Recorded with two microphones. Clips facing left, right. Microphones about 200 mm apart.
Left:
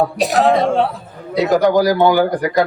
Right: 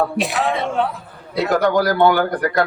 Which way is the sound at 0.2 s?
40° left (ahead or behind).